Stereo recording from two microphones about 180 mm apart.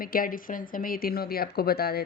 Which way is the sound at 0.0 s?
55° left (ahead or behind).